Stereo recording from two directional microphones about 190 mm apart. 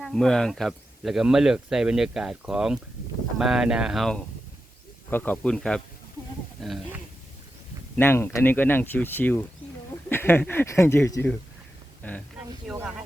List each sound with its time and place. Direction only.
0.0 s speech: centre (ahead or behind)
7.9 s speech: 10° left (ahead or behind)
12.6 s speech: 10° right (ahead or behind)